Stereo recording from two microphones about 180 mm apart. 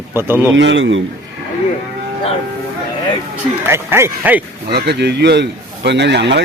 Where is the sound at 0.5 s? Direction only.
90° right.